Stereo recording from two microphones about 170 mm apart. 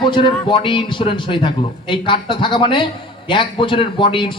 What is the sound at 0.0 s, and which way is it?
A man's voice, 30° left (ahead or behind).